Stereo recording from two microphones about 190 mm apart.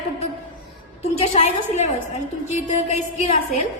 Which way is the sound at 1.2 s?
35° left (ahead or behind).